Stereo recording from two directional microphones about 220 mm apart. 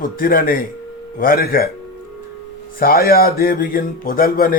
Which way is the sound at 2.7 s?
40° left (ahead or behind).